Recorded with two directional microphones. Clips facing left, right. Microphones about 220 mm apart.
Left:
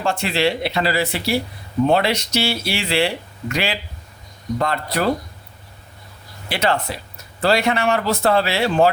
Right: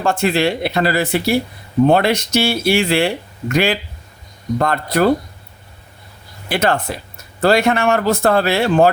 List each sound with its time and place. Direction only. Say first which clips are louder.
0.0 s speech: right 4 dB; 50° right (ahead or behind)
6.5 s speech: right 3 dB; 50° right (ahead or behind)